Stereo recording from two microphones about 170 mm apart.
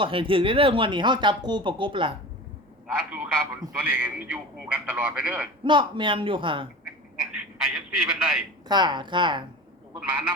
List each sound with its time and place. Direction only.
0.0 s speech: 30° right (ahead or behind)
2.8 s a man's voice: 5° right (ahead or behind)
5.6 s speech: 30° right (ahead or behind)
6.8 s a sound: 5° right (ahead or behind)
8.6 s speech: 25° right (ahead or behind)
10.0 s speech: 5° right (ahead or behind)